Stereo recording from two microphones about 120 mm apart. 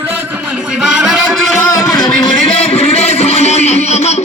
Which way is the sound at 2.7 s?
60° left (ahead or behind).